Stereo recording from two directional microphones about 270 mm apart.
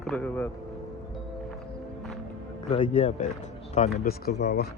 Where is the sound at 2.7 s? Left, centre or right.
Left.